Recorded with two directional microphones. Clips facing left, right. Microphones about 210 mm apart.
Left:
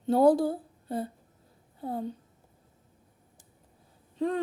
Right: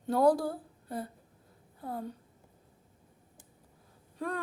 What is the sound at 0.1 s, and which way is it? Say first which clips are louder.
Speech: left 4 dB; 25° left (ahead or behind).